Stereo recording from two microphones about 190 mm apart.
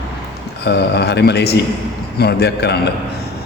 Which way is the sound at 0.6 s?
60° left (ahead or behind).